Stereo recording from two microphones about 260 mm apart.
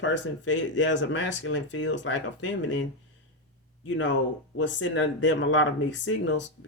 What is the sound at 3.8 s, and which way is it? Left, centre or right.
Speech, left.